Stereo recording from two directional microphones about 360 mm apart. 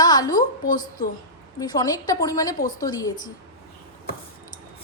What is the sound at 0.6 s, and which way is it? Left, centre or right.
Speech, left.